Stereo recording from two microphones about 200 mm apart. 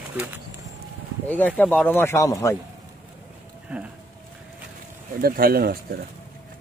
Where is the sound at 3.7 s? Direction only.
5° right (ahead or behind).